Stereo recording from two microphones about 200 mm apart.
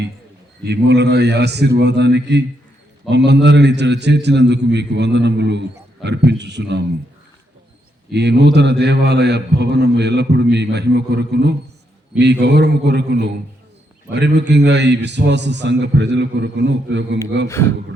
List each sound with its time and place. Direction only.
0.6 s a man's voice: 55° right (ahead or behind)
8.1 s a man's voice: 55° right (ahead or behind)